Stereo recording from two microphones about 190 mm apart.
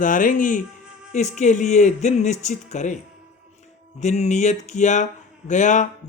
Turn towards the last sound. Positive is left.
turn(degrees=40)  # may be behind; listen again after turning